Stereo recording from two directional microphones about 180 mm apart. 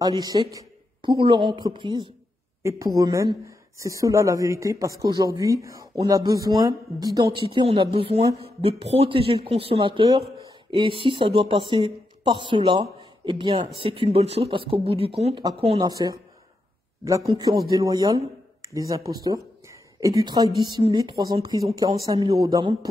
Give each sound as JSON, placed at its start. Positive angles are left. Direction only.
{"t": 0.0, "sound": "a woman's voice", "side_deg": -20}
{"t": 15.8, "sound": "a woman's voice", "side_deg": -20}